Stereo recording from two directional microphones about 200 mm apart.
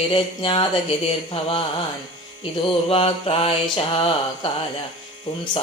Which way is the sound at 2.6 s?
25° left (ahead or behind).